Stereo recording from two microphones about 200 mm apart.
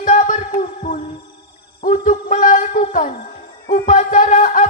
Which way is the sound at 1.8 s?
40° left (ahead or behind).